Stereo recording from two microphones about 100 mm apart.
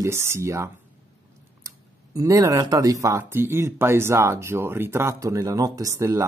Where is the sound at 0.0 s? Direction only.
30° right (ahead or behind).